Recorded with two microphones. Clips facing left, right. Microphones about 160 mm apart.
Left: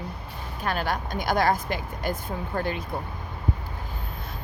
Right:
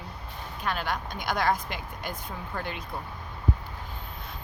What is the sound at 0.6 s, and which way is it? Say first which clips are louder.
Speech: left 3 dB; 40° left (ahead or behind).